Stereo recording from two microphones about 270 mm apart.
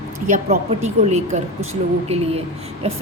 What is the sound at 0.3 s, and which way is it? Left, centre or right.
A woman's voice, right.